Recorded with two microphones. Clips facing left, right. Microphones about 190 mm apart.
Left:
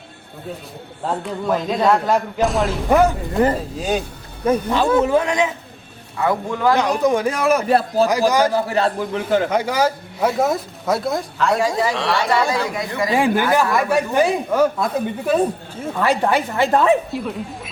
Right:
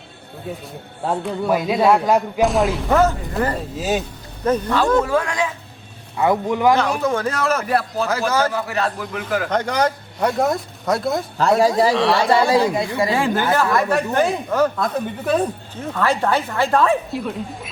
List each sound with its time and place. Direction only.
1.0 s a man's voice: 10° right (ahead or behind)
2.9 s speech: 15° left (ahead or behind)
3.6 s speech: 5° right (ahead or behind)
4.4 s speech: 10° left (ahead or behind)
5.0 s a man's voice: 20° left (ahead or behind)
6.1 s a man's voice: 20° right (ahead or behind)
6.7 s speech: 15° left (ahead or behind)
7.7 s a man's voice: 25° left (ahead or behind)
8.3 s speech: 15° left (ahead or behind)
8.5 s a man's voice: 30° left (ahead or behind)
9.5 s speech: 5° left (ahead or behind)
12.3 s speech: 30° right (ahead or behind)
13.1 s speech: 15° left (ahead or behind)
17.1 s speech: centre (ahead or behind)